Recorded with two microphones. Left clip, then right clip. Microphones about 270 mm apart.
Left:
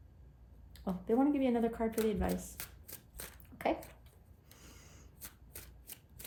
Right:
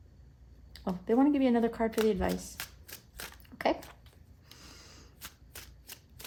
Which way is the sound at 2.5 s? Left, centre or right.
Centre.